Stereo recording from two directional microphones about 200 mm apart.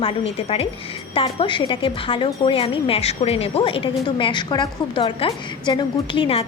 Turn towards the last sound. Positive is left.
turn(degrees=25)  # may be behind; listen again after turning